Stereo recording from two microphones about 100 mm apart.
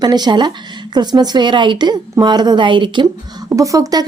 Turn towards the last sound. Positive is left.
turn(degrees=-40)  # may be behind; listen again after turning